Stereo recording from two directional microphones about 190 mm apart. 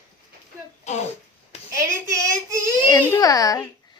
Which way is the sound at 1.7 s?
15° right (ahead or behind).